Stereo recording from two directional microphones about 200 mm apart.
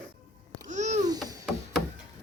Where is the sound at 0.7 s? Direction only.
35° right (ahead or behind).